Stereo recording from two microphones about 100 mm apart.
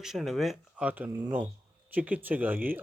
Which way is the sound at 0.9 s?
20° right (ahead or behind).